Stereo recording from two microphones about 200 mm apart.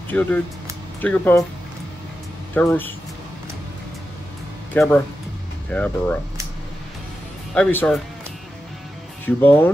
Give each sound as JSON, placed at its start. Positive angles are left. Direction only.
{"t": 0.1, "sound": "speech", "side_deg": 10}
{"t": 2.5, "sound": "speech", "side_deg": 10}
{"t": 4.7, "sound": "speech", "side_deg": 10}
{"t": 7.5, "sound": "speech", "side_deg": 5}
{"t": 9.2, "sound": "speech", "side_deg": 10}